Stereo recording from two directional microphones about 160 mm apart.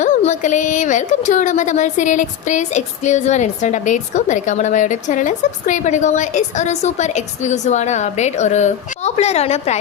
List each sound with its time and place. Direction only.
0.0 s a woman's voice: 50° left (ahead or behind)